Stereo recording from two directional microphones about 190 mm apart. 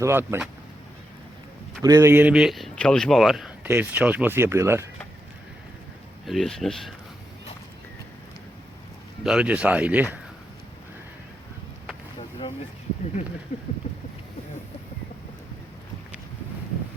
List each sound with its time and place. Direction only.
0.0 s speech: 15° right (ahead or behind)
1.8 s speech: 15° right (ahead or behind)
6.2 s speech: centre (ahead or behind)
9.2 s speech: 5° right (ahead or behind)
13.5 s speech: 35° left (ahead or behind)